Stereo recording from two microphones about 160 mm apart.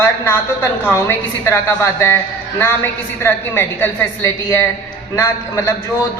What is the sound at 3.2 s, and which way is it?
A man's voice, 15° left (ahead or behind).